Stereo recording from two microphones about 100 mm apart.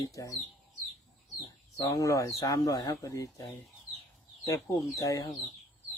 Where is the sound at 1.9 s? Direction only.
30° left (ahead or behind).